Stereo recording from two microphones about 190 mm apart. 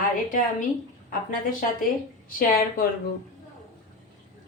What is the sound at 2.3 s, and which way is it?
Speech, 50° left (ahead or behind).